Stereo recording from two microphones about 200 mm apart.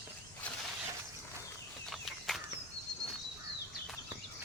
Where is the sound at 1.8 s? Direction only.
Centre (ahead or behind).